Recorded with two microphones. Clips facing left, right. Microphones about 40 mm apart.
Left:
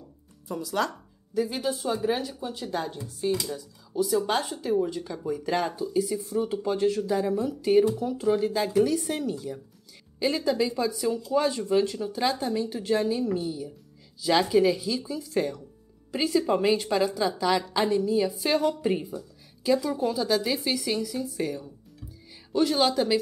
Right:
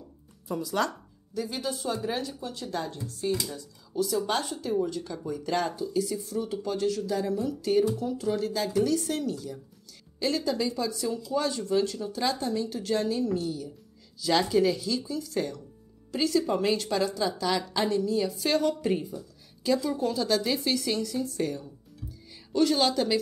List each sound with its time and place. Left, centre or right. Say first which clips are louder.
0.5 s a woman's voice: even; centre
22.0 s music: right 3 dB; left
22.5 s a woman's voice: left 1 dB; centre